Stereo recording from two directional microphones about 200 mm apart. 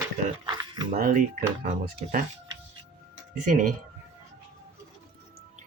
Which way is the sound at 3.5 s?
40° right (ahead or behind).